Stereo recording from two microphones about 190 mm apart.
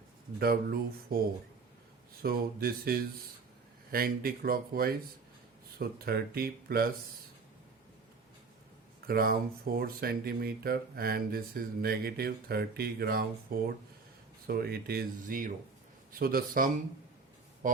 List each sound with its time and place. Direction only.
0.3 s speech: 55° right (ahead or behind)
2.2 s speech: 50° right (ahead or behind)
9.0 s speech: 50° right (ahead or behind)
14.4 s speech: 55° right (ahead or behind)